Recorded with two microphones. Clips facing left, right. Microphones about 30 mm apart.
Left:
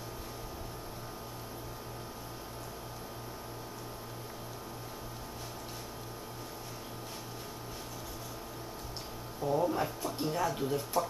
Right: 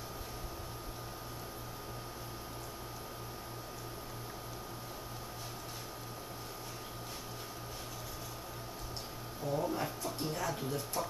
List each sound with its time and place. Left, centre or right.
9.4 s speech: centre